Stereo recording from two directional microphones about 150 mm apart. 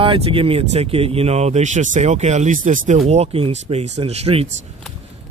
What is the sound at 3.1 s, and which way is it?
Speech, 40° right (ahead or behind).